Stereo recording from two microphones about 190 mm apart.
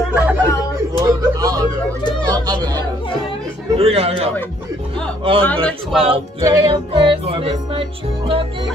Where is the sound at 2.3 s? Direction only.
20° right (ahead or behind).